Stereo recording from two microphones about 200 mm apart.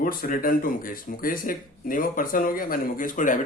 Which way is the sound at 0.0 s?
45° left (ahead or behind).